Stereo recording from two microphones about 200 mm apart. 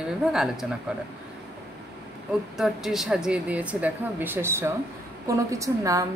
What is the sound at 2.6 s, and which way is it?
A woman's voice, centre (ahead or behind).